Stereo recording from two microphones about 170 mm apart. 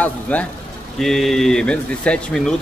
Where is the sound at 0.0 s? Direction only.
10° left (ahead or behind).